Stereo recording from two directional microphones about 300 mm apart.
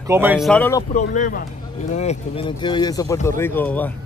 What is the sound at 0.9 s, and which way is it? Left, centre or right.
Speech, left.